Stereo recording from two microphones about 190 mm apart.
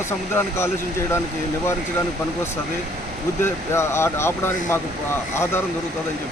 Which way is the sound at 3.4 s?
15° left (ahead or behind).